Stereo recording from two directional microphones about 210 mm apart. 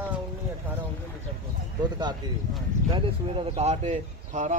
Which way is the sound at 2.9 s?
25° right (ahead or behind).